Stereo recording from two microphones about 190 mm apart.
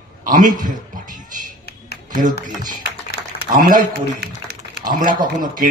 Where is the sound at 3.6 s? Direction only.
45° right (ahead or behind).